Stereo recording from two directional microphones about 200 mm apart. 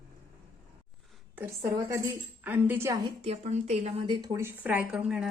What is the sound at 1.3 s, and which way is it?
Speech, 10° right (ahead or behind).